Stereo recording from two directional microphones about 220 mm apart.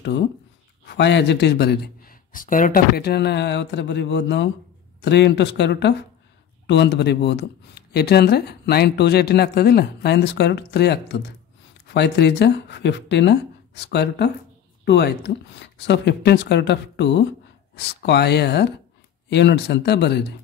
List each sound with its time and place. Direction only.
0.8 s speech: 50° left (ahead or behind)